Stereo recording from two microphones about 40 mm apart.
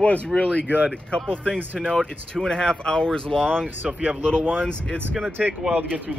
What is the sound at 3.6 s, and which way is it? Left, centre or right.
Speech, right.